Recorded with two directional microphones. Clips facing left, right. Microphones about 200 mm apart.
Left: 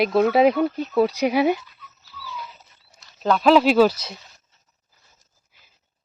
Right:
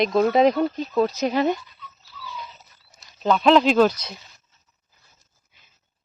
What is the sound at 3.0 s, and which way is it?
Speech, 5° left (ahead or behind).